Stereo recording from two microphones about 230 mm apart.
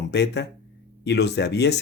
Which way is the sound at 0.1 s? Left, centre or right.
Left.